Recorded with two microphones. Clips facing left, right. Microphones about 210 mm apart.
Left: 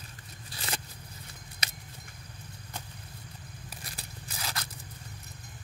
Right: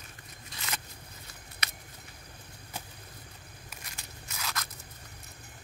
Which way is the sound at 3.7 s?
35° left (ahead or behind).